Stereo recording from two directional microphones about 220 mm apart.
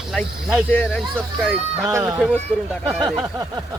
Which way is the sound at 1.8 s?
15° right (ahead or behind).